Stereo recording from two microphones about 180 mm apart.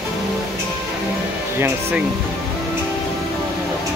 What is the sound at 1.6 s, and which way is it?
Speech, 10° right (ahead or behind).